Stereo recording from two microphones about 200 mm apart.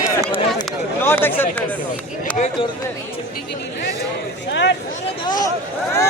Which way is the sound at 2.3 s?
5° left (ahead or behind).